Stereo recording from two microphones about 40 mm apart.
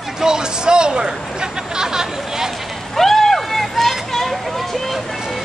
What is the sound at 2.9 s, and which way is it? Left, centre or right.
Vehicle, centre.